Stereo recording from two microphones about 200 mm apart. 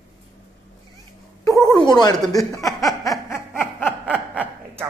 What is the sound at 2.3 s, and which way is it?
Speech, 15° left (ahead or behind).